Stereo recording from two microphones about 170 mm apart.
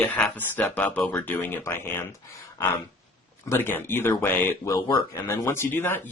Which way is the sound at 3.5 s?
15° left (ahead or behind).